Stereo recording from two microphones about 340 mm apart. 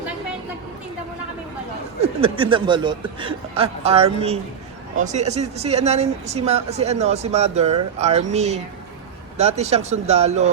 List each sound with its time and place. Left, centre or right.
2.0 s speech: centre